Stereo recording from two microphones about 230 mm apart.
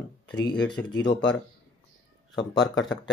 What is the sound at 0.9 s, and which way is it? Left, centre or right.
Speech, centre.